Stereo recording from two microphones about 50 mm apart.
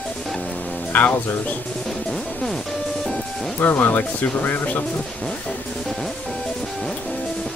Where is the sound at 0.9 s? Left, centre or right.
Left.